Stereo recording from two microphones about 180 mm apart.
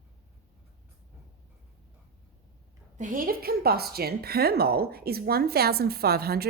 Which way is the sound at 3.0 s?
50° right (ahead or behind).